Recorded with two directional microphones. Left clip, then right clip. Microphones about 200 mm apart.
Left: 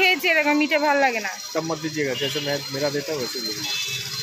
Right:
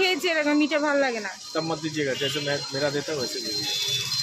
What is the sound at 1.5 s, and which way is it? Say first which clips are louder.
Speech: even; 25° left (ahead or behind).